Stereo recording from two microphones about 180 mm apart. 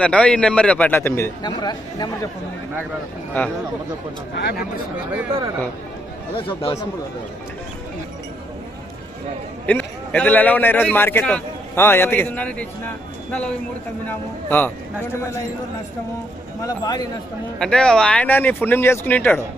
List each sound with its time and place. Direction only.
0.0 s a man's voice: 5° left (ahead or behind); by 2.0 s 20° left (ahead or behind)
4.4 s speech: 75° left (ahead or behind)
6.3 s speech: 30° left (ahead or behind)
9.6 s a man's voice: 10° left (ahead or behind)
16.6 s speech: 20° left (ahead or behind)
17.6 s a man's voice: 5° left (ahead or behind)